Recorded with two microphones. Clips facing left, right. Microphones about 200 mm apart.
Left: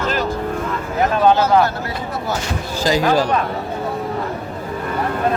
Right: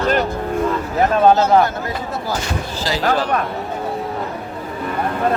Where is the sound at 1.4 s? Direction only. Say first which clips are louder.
Right 1 dB; 25° right (ahead or behind).